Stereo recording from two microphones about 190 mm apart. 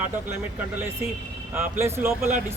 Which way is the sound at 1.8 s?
15° right (ahead or behind).